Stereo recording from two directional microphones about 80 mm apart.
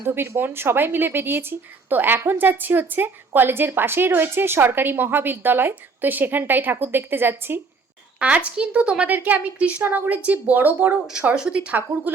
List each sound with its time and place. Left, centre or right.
0.0 s a woman's voice: right
8.2 s a woman's voice: centre
11.0 s a woman's voice: centre